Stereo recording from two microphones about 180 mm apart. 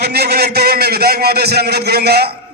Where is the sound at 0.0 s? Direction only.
65° right (ahead or behind).